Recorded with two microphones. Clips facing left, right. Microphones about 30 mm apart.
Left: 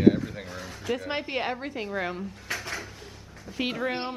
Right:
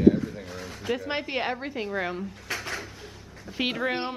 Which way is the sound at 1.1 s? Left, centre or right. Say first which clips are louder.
Right 1 dB; centre.